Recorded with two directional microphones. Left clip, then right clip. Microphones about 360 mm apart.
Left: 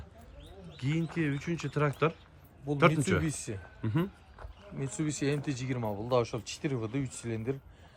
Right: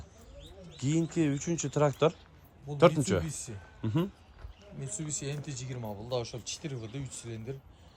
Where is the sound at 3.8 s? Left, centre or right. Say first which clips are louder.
Right 1 dB; centre.